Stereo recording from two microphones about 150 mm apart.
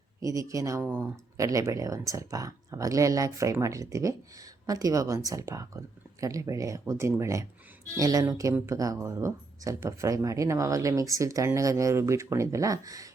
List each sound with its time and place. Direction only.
0.2 s a woman's voice: 20° right (ahead or behind)